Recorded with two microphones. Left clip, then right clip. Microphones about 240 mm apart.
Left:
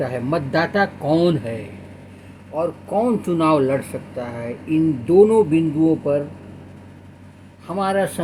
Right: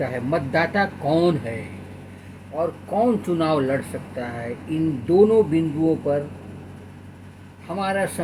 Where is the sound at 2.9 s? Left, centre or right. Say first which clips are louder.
Left 1 dB; left.